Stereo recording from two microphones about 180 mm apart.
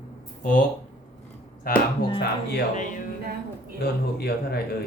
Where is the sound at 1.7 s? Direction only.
55° left (ahead or behind).